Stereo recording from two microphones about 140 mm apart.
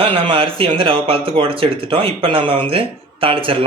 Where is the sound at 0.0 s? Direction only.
40° right (ahead or behind).